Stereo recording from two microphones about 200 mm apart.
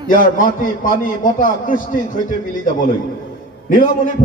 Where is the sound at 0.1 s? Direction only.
40° left (ahead or behind).